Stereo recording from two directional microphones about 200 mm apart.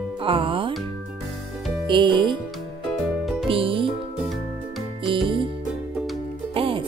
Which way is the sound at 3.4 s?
25° right (ahead or behind).